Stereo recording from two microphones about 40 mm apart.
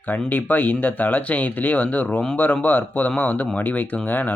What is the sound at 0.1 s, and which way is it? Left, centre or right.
Speech, left.